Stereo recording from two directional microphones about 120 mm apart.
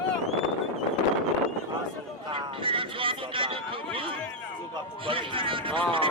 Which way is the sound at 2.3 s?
45° right (ahead or behind).